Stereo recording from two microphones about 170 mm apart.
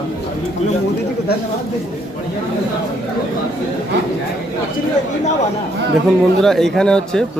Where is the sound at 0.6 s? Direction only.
40° left (ahead or behind).